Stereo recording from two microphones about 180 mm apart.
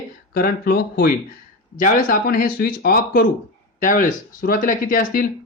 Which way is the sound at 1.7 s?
50° left (ahead or behind).